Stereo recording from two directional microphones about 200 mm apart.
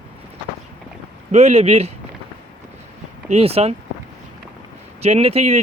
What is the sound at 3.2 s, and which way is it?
Speech, 30° right (ahead or behind).